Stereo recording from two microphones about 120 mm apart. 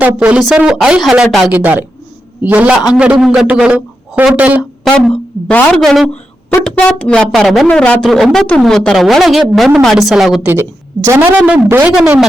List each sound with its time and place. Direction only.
0.2 s a man's voice: 5° right (ahead or behind)
4.8 s a woman's voice: 5° left (ahead or behind)
5.8 s speech: centre (ahead or behind)
10.4 s speech: 20° right (ahead or behind)